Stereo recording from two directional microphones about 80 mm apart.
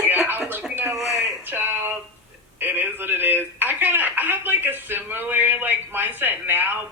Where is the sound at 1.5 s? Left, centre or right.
Right.